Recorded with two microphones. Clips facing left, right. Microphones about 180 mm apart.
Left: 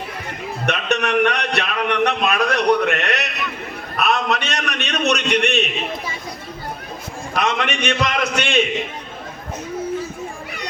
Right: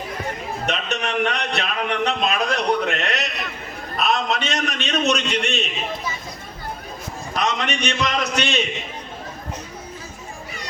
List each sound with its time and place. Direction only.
0.6 s a man's voice: 65° left (ahead or behind)
7.3 s a man's voice: 55° left (ahead or behind)